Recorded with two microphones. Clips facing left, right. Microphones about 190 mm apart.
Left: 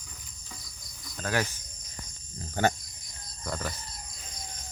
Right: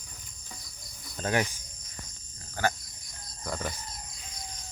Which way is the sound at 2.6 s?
25° left (ahead or behind).